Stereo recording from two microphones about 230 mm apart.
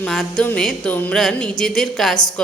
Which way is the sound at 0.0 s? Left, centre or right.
Centre.